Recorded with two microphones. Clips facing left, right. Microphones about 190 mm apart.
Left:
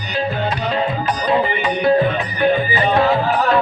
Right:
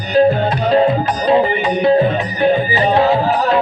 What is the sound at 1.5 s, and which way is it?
Music, 45° right (ahead or behind).